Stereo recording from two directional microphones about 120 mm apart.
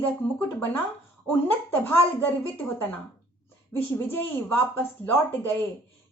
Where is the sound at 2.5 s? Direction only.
15° left (ahead or behind).